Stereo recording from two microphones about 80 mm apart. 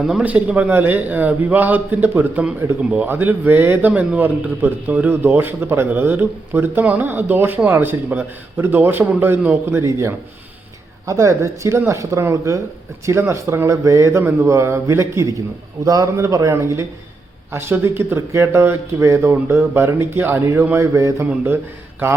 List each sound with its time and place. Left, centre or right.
0.2 s a man's voice: centre
9.8 s speech: right